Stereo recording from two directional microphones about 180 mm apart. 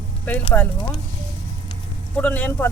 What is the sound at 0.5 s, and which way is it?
Speech, 10° left (ahead or behind).